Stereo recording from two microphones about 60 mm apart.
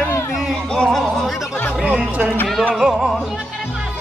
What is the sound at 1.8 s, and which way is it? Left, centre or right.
Music, centre.